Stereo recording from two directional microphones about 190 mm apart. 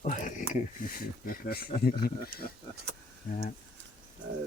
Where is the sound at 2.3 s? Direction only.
85° right.